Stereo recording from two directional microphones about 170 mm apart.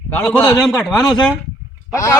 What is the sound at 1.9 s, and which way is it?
Speech, 20° left (ahead or behind).